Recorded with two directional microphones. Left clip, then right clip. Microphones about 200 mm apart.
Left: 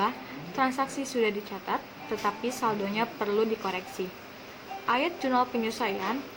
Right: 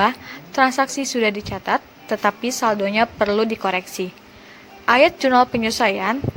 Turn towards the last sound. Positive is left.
turn(degrees=-50)  # may be behind; listen again after turning